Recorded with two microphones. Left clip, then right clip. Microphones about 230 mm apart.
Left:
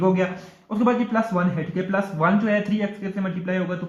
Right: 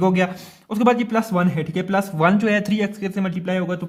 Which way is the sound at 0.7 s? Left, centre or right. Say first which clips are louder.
Right 3 dB; right.